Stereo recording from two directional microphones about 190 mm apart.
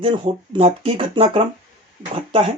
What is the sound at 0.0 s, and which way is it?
Speech, 25° right (ahead or behind).